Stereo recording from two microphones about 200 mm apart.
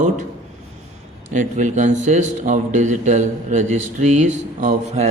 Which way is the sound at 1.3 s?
40° right (ahead or behind).